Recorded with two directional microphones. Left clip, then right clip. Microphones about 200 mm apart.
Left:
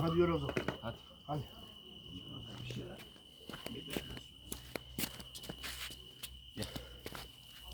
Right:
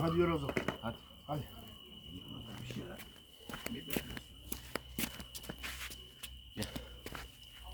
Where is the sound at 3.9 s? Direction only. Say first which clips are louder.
Right 2 dB; 50° right (ahead or behind).